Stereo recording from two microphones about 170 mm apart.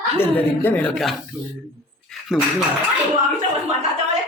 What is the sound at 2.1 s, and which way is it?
Dishes, centre (ahead or behind).